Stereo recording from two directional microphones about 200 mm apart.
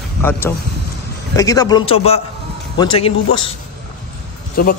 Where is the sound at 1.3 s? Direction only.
15° left (ahead or behind).